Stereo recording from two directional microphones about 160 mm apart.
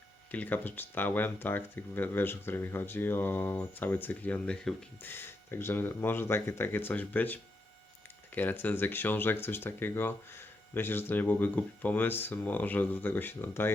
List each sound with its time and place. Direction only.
0.3 s speech: 10° left (ahead or behind)
8.4 s speech: 10° left (ahead or behind)